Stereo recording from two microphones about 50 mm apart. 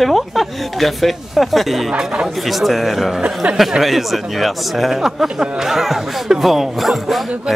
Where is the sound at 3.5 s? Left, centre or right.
Centre.